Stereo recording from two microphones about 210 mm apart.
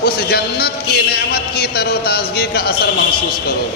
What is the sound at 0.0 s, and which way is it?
A man's voice, 50° left (ahead or behind).